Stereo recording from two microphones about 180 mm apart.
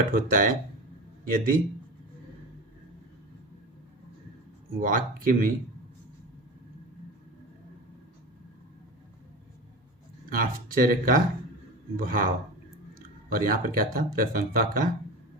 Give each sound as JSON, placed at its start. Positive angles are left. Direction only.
{"t": 0.1, "sound": "a man's voice", "side_deg": -50}
{"t": 4.8, "sound": "speech", "side_deg": -50}
{"t": 10.2, "sound": "speech", "side_deg": -50}
{"t": 13.3, "sound": "speech", "side_deg": -50}